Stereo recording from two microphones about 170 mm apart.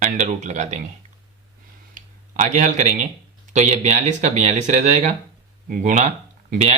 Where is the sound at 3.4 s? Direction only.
45° right (ahead or behind).